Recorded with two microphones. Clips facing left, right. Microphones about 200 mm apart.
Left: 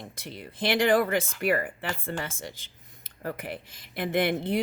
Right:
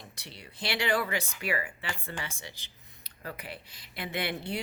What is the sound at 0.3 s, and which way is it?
Speech, 50° left (ahead or behind).